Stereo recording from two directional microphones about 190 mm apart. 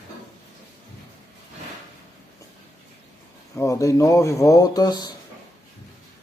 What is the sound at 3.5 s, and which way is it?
Speech, 15° left (ahead or behind).